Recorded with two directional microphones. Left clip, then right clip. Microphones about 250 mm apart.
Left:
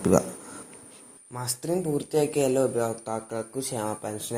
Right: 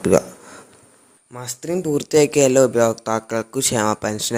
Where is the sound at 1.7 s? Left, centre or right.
Right.